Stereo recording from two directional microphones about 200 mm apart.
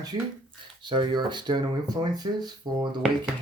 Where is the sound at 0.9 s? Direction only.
25° right (ahead or behind).